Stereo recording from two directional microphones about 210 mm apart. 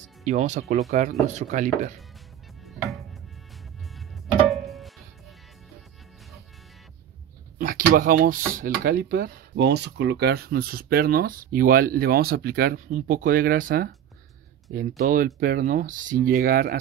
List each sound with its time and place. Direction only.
0.0 s speech: 35° right (ahead or behind)
4.5 s music: centre (ahead or behind)
7.5 s a sound: 40° right (ahead or behind)
8.5 s speech: 45° right (ahead or behind)